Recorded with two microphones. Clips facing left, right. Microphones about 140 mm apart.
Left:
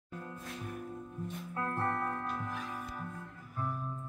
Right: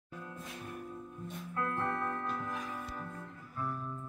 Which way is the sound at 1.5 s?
30° left (ahead or behind).